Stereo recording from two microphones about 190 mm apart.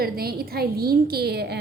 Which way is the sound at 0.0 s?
50° right (ahead or behind).